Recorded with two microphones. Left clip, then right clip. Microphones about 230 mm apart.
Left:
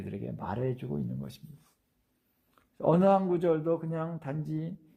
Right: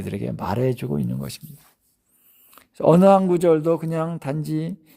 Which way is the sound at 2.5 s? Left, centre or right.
Right.